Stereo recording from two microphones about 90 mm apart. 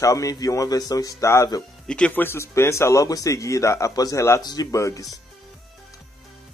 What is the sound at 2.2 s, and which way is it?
A man's voice, 30° left (ahead or behind).